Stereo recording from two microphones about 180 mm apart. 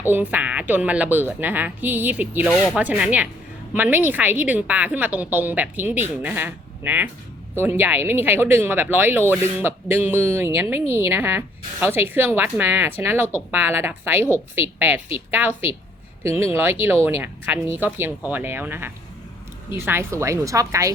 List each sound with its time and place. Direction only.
0.0 s speech: 10° right (ahead or behind)